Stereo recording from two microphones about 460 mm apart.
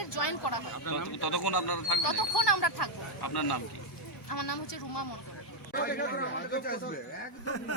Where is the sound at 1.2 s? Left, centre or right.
Left.